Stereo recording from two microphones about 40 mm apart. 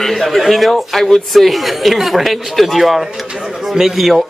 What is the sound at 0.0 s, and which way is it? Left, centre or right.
A woman's voice, centre.